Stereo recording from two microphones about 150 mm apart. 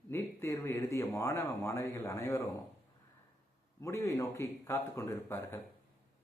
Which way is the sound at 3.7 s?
20° left (ahead or behind).